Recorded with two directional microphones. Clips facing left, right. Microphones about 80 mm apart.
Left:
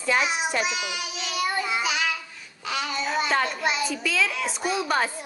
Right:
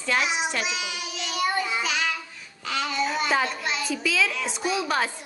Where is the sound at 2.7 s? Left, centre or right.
Centre.